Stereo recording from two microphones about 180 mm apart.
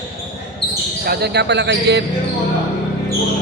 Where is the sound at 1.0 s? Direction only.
65° right (ahead or behind).